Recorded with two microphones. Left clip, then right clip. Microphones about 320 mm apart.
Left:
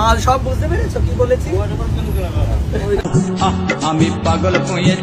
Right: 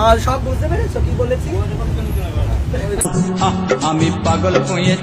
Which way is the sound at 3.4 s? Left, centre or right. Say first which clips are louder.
Right 2 dB; centre.